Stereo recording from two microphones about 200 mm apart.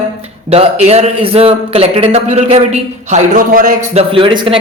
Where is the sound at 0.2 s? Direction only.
30° right (ahead or behind).